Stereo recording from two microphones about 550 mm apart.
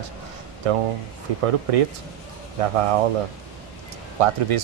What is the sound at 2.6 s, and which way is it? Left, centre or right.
Speech, right.